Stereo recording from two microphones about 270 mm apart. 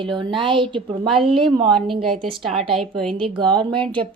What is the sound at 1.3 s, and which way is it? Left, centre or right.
Speech, centre.